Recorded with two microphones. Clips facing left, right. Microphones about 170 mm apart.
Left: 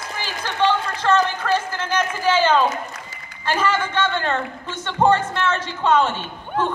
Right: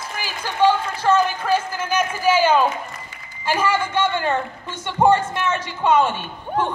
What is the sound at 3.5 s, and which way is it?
A man's voice, 10° right (ahead or behind).